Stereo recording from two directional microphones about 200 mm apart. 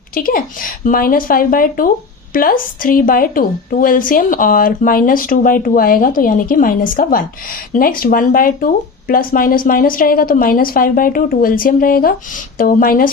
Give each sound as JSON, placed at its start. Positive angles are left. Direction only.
{"t": 0.1, "sound": "a woman's voice", "side_deg": 45}